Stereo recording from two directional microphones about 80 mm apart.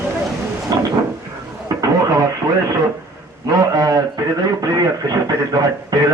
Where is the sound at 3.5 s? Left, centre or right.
Right.